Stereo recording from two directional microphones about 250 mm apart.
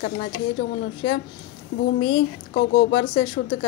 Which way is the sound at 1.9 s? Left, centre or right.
Left.